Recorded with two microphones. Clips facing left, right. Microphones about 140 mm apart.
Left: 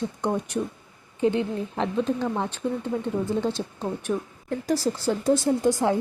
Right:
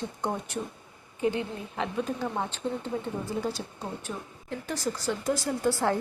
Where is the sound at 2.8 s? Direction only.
20° left (ahead or behind).